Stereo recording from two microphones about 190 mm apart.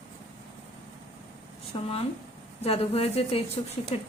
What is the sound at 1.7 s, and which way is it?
A woman's voice, 25° left (ahead or behind).